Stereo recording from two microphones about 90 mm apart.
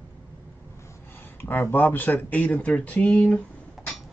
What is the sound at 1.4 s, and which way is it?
Speech, 20° left (ahead or behind).